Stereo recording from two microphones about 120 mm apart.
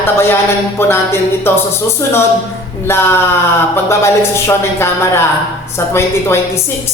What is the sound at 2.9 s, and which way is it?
Speech, 20° left (ahead or behind).